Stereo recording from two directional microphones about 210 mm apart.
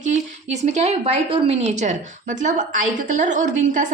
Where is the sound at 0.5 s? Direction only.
30° right (ahead or behind).